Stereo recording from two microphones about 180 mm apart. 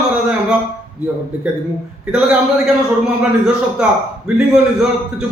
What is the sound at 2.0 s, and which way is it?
Speech, 5° right (ahead or behind).